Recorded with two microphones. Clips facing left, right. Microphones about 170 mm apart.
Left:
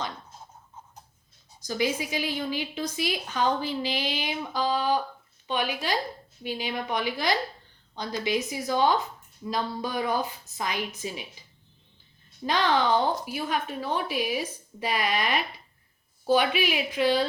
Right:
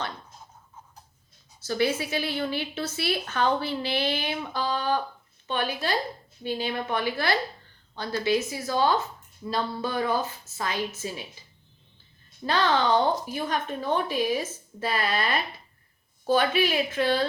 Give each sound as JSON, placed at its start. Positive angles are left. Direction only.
{"t": 1.6, "sound": "a woman's voice", "side_deg": 15}
{"t": 12.5, "sound": "a woman's voice", "side_deg": 15}